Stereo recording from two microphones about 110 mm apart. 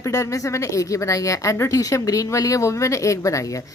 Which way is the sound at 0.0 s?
30° left (ahead or behind).